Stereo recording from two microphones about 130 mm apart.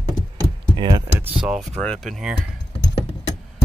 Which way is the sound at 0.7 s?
35° right (ahead or behind).